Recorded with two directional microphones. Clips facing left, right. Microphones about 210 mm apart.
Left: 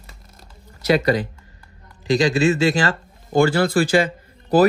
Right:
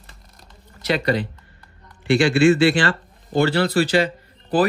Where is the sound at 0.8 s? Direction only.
45° left (ahead or behind).